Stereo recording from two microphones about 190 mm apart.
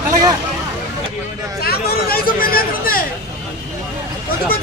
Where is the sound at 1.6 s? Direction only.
50° left (ahead or behind).